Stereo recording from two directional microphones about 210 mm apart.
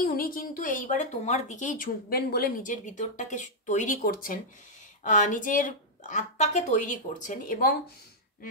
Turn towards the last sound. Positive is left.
turn(degrees=40)  # may be behind; listen again after turning